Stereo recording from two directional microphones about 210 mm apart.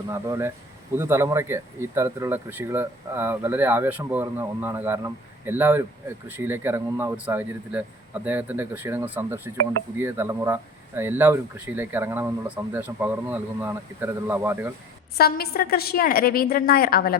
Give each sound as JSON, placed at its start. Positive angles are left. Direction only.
{"t": 0.1, "sound": "speech", "side_deg": -15}
{"t": 15.2, "sound": "a woman's voice", "side_deg": 45}